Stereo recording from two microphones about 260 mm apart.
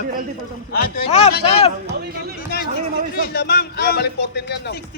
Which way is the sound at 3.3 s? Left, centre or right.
Left.